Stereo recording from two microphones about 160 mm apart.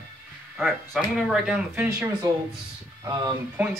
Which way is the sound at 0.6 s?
Centre (ahead or behind).